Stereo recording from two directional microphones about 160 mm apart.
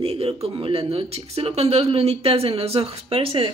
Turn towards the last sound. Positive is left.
turn(degrees=-35)  # may be behind; listen again after turning